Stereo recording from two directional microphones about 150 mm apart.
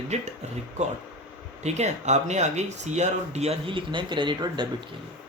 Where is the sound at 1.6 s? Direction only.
50° right (ahead or behind); by 4.6 s 30° right (ahead or behind).